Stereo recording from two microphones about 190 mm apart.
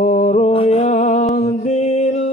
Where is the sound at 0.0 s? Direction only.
40° left (ahead or behind).